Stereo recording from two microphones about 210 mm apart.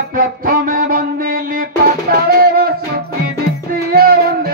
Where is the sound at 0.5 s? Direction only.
40° right (ahead or behind).